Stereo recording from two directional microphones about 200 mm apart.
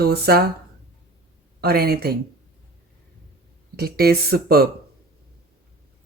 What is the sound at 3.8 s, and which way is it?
Speech, 50° right (ahead or behind).